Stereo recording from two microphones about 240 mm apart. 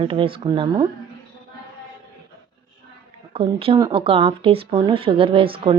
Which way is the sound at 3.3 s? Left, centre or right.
Right.